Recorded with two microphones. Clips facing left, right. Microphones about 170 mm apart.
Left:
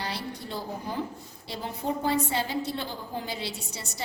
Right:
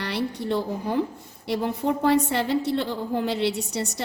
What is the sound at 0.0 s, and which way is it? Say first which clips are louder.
A woman's voice: right 7 dB; 65° right (ahead or behind).